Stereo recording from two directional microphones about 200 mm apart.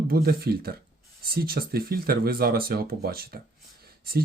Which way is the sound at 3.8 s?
50° right (ahead or behind).